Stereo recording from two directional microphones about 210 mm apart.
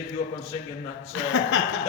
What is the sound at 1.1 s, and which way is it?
Speech, 65° left (ahead or behind).